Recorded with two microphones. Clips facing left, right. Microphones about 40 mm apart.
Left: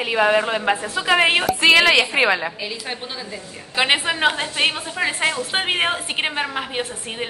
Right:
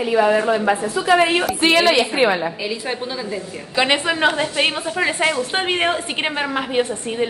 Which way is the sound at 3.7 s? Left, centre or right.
Centre.